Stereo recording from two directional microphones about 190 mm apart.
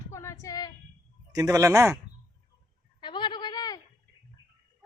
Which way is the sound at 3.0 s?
25° left (ahead or behind).